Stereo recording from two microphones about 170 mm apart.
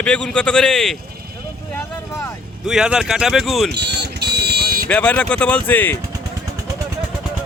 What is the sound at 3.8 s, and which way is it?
Vehicle, 80° right.